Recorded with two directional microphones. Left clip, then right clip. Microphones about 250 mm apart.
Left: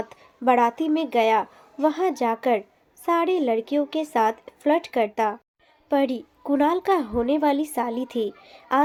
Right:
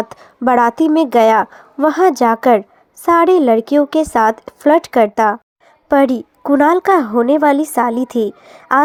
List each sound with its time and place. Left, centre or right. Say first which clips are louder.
0.1 s a woman's voice: right 5 dB; right